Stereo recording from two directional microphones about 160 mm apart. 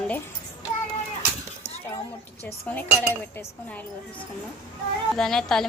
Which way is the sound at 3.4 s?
10° left (ahead or behind).